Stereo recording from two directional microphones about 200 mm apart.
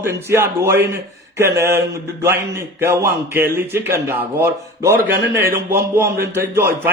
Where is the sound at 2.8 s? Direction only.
10° right (ahead or behind).